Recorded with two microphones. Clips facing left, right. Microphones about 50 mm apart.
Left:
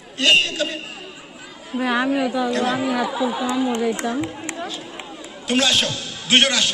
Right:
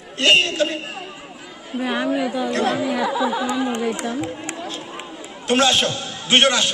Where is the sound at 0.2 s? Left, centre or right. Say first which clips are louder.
Right 1 dB; right.